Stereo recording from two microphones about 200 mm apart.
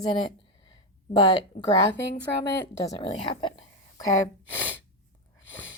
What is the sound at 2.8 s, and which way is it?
Speech, 20° left (ahead or behind).